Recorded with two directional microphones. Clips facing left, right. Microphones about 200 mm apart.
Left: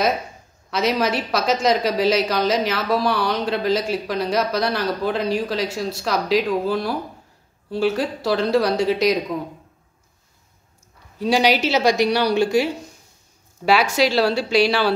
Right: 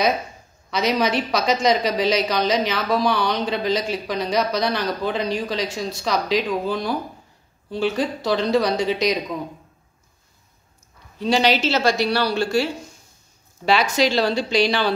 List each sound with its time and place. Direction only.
0.7 s a woman's voice: 5° left (ahead or behind)
11.1 s speech: 10° left (ahead or behind)
13.9 s a woman's voice: 5° left (ahead or behind)